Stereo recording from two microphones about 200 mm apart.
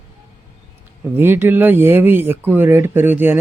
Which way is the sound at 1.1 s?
10° right (ahead or behind).